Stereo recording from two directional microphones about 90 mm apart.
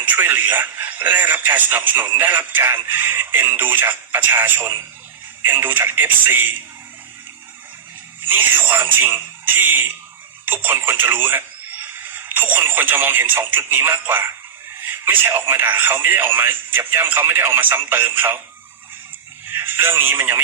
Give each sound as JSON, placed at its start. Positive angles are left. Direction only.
{"t": 0.0, "sound": "speech", "side_deg": -20}
{"t": 8.3, "sound": "speech", "side_deg": -20}
{"t": 19.5, "sound": "speech", "side_deg": -25}